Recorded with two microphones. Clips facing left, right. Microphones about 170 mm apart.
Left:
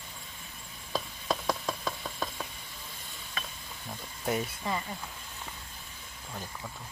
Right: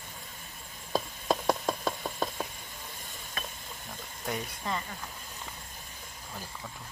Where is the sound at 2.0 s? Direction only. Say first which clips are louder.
Right 4 dB; 30° right (ahead or behind).